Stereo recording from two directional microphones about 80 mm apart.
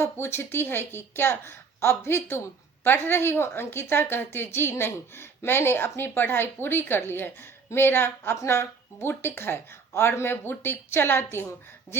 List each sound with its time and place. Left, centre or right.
0.0 s a woman's voice: left